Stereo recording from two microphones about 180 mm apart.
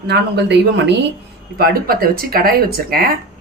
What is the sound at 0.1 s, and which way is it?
Speech, 70° right (ahead or behind).